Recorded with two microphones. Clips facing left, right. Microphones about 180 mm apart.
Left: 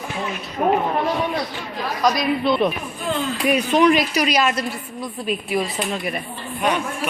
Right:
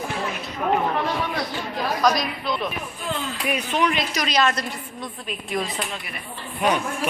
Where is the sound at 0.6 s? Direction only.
45° left (ahead or behind).